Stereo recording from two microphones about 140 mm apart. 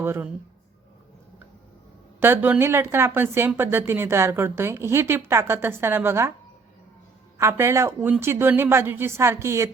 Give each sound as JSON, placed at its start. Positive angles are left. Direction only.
{"t": 0.0, "sound": "speech", "side_deg": -15}
{"t": 2.2, "sound": "speech", "side_deg": -15}
{"t": 7.3, "sound": "speech", "side_deg": -20}